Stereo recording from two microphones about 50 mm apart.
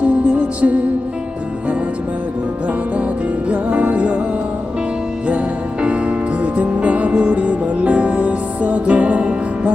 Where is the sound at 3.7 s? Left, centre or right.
Right.